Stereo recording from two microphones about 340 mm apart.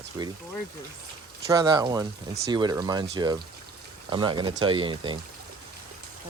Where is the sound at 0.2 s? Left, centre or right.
Centre.